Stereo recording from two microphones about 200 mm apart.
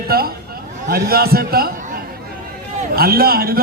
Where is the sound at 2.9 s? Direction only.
50° right (ahead or behind).